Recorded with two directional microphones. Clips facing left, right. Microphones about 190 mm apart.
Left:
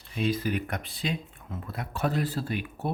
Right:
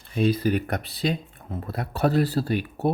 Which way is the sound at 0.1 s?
40° right (ahead or behind).